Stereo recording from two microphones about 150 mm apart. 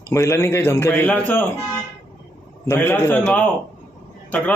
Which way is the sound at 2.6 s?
15° left (ahead or behind).